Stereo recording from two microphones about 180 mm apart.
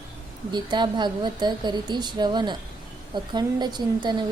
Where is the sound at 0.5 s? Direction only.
25° right (ahead or behind).